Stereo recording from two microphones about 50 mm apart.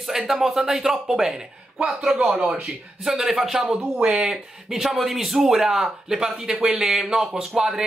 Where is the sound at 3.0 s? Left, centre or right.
Centre.